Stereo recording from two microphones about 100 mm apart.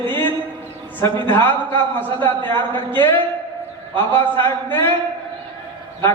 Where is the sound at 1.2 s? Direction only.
20° left (ahead or behind).